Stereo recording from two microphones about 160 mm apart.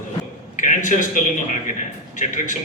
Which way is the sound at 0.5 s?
50° left (ahead or behind).